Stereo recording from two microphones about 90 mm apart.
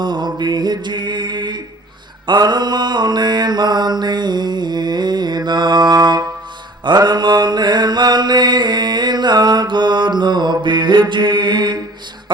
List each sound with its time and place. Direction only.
0.0 s mantra: 55° right (ahead or behind)